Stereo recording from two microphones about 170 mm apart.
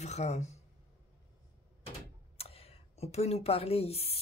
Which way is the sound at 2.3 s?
35° left (ahead or behind).